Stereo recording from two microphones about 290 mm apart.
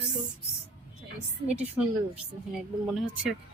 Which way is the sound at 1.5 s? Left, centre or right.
Centre.